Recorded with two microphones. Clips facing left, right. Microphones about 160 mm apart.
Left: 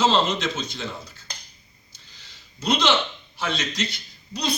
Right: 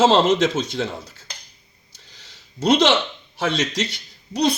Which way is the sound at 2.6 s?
80° right.